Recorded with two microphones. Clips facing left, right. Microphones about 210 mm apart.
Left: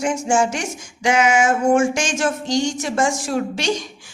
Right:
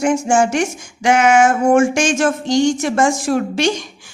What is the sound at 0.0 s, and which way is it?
A man's voice, 60° right (ahead or behind).